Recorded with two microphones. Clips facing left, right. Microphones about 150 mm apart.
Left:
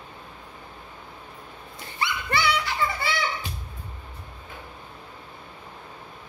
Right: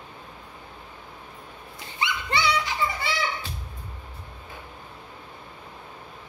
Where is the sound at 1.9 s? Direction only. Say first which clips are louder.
Even; 20° right (ahead or behind).